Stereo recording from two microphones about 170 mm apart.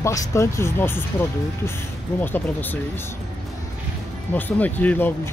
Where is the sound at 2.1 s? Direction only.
10° left (ahead or behind).